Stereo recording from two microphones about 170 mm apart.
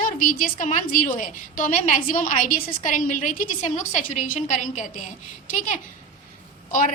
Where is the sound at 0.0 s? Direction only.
50° left (ahead or behind).